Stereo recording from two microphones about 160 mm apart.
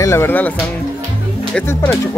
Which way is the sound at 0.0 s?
15° left (ahead or behind).